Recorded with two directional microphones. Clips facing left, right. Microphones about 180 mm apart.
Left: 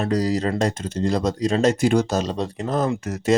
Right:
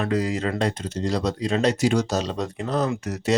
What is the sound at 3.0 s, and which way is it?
Speech, 50° left (ahead or behind).